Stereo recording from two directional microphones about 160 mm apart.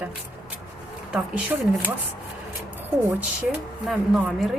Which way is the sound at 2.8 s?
10° right (ahead or behind).